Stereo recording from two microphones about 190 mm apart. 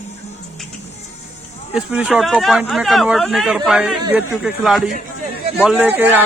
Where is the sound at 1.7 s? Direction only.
5° right (ahead or behind).